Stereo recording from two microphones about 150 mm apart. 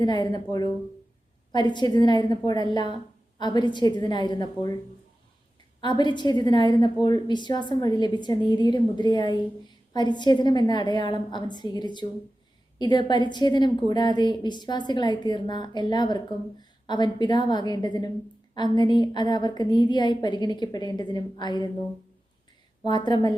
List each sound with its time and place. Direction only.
0.0 s a woman's voice: 30° left (ahead or behind)
5.8 s a woman's voice: 30° left (ahead or behind)
22.8 s a woman's voice: 30° left (ahead or behind)